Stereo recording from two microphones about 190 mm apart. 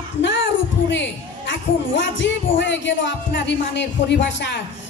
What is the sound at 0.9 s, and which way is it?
Speech, 70° left (ahead or behind).